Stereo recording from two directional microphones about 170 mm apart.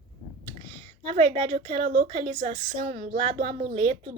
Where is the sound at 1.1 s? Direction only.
35° right (ahead or behind).